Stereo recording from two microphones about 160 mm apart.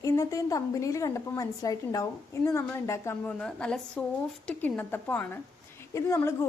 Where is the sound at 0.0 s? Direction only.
20° left (ahead or behind).